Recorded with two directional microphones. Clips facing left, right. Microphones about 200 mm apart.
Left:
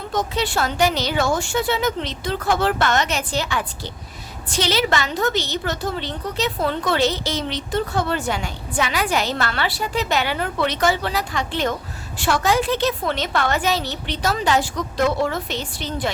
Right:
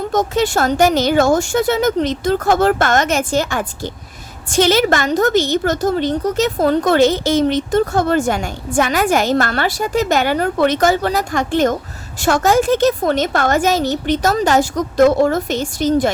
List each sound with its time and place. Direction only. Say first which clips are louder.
0.1 s a woman's voice: right 5 dB; 45° right (ahead or behind)